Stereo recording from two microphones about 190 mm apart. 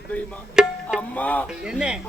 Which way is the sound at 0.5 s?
Centre (ahead or behind).